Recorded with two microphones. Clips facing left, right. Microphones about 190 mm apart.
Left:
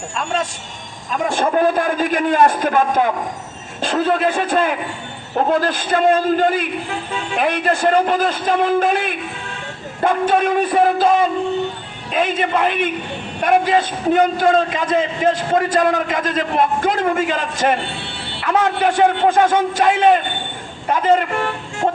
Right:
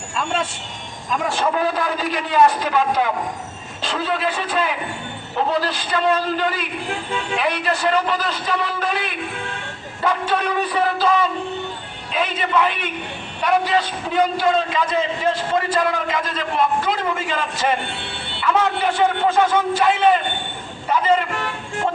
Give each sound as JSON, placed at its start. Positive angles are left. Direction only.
{"t": 1.4, "sound": "a man's voice", "side_deg": 50}